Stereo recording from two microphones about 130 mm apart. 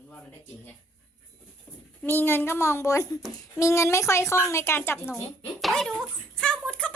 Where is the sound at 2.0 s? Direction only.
15° left (ahead or behind).